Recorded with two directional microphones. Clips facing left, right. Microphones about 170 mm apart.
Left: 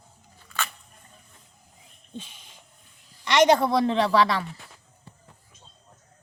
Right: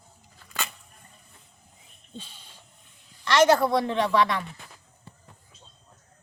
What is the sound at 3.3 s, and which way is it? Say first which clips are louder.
A woman's voice: even; 20° left (ahead or behind).